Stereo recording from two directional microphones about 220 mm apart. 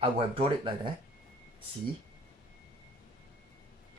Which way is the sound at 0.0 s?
25° right (ahead or behind).